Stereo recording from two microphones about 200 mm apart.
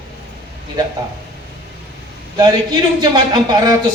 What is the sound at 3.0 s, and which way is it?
Speech, 20° right (ahead or behind).